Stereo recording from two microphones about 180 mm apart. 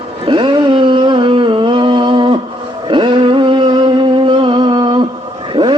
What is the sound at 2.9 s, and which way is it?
Music, 25° right (ahead or behind).